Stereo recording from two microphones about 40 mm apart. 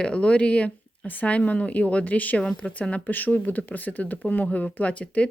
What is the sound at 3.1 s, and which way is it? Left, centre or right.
A woman's voice, left.